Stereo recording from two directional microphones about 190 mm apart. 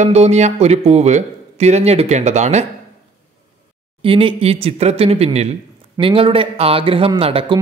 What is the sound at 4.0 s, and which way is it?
A man's voice, 30° right (ahead or behind).